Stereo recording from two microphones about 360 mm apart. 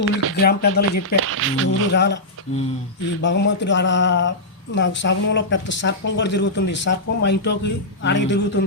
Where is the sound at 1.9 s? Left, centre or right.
Left.